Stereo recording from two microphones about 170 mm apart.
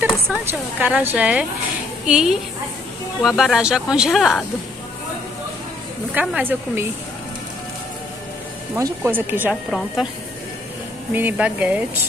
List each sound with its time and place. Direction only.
0.5 s speech: 10° right (ahead or behind)
6.1 s speech: 10° right (ahead or behind)
8.7 s speech: 15° right (ahead or behind)
9.7 s speech: centre (ahead or behind)
11.1 s speech: 10° right (ahead or behind)